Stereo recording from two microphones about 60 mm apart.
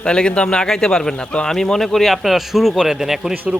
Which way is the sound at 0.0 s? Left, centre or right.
Centre.